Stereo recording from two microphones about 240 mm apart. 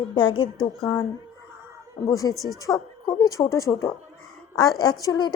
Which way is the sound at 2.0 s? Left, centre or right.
Centre.